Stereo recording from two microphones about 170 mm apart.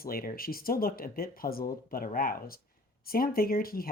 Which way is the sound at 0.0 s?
60° left (ahead or behind).